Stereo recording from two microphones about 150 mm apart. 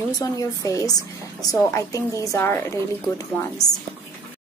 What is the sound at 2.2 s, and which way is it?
A woman's voice, 20° left (ahead or behind).